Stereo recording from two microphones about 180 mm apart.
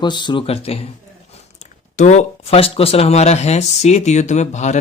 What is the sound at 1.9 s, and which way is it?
Speech, 40° left (ahead or behind).